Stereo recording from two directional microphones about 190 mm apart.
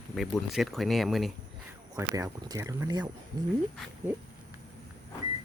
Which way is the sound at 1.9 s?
20° right (ahead or behind).